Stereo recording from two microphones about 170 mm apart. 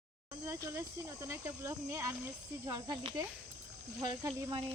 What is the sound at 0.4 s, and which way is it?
Speech, 15° right (ahead or behind).